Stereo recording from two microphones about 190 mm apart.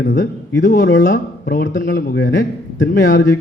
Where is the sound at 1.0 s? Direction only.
45° left (ahead or behind).